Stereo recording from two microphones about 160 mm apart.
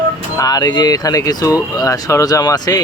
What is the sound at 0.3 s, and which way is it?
Speech, 25° left (ahead or behind).